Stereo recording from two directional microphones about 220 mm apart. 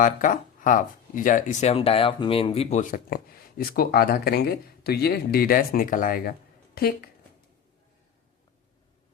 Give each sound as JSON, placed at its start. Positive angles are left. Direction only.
{"t": 0.0, "sound": "speech", "side_deg": 35}